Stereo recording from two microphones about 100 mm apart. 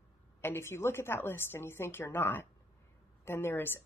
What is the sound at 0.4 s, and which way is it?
Speech, 25° left (ahead or behind).